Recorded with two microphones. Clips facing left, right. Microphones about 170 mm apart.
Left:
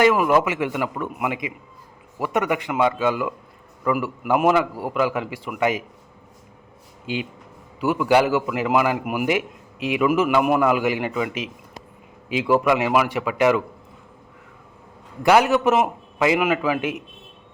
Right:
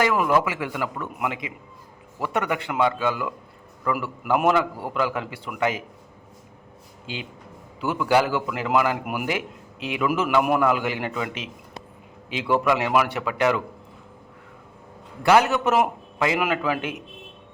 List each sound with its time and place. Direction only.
0.2 s a man's voice: 20° left (ahead or behind)
7.8 s a man's voice: 15° left (ahead or behind)
15.2 s a man's voice: 15° left (ahead or behind)
15.5 s a man's voice: centre (ahead or behind)